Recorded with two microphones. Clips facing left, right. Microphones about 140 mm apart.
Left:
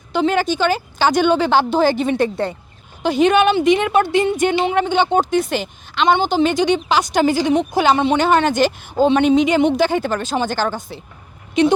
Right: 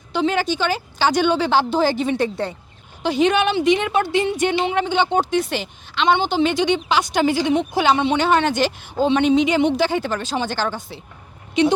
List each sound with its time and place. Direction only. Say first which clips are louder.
0.1 s a woman's voice: left 3 dB; 50° left (ahead or behind)